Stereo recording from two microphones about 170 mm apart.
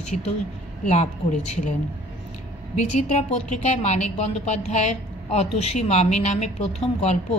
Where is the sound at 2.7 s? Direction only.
45° left (ahead or behind).